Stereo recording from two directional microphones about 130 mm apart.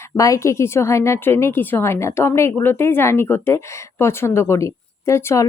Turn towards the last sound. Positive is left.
turn(degrees=20)  # may be behind; listen again after turning